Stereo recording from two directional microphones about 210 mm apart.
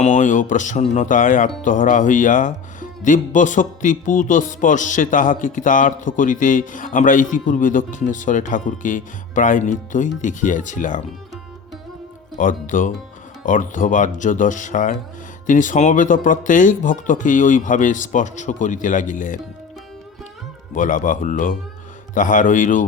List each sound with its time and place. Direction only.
0.0 s speech: 35° left (ahead or behind)
12.4 s speech: 40° left (ahead or behind)
20.7 s speech: 40° left (ahead or behind)